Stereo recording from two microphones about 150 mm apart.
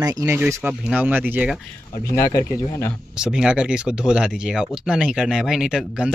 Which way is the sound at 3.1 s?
5° right (ahead or behind).